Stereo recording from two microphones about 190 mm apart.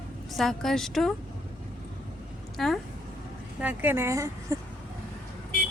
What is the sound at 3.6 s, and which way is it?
Speech, 10° right (ahead or behind).